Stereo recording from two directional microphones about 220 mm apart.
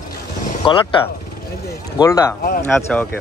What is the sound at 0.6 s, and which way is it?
Speech, 25° left (ahead or behind).